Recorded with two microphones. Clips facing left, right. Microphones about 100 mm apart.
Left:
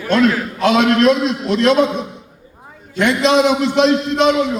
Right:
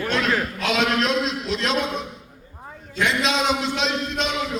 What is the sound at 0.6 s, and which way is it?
A man's voice, 60° left (ahead or behind).